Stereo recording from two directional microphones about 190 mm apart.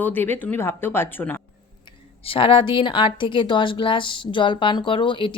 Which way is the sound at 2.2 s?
30° left (ahead or behind).